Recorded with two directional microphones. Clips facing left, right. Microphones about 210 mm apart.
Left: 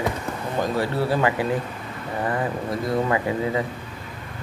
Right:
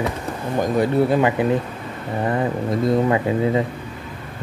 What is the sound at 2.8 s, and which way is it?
Speech, 25° right (ahead or behind).